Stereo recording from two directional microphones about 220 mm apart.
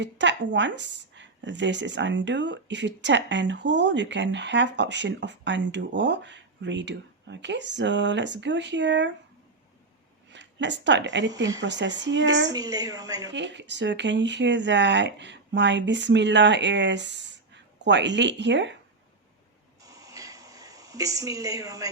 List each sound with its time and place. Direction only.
0.0 s a woman's voice: 55° right (ahead or behind)
10.3 s a woman's voice: 55° right (ahead or behind)
12.5 s a woman's voice: 15° right (ahead or behind)
13.3 s a woman's voice: 55° right (ahead or behind)
19.8 s a sound: 15° right (ahead or behind)